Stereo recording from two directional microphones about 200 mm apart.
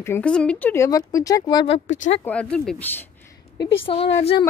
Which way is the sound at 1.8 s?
40° left (ahead or behind).